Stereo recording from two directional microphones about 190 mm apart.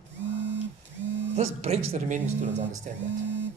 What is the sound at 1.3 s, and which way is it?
A man's voice, 35° right (ahead or behind).